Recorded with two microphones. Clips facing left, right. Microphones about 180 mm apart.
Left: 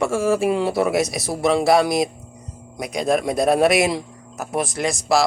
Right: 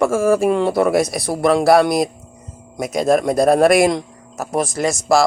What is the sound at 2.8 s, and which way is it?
Speech, 45° right (ahead or behind).